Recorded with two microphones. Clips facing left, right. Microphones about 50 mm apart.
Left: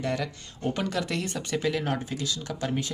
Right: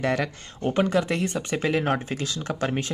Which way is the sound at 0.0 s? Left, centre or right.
Right.